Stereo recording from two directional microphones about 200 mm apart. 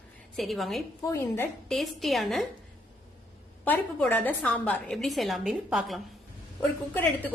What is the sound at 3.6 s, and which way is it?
A woman's voice, 10° left (ahead or behind).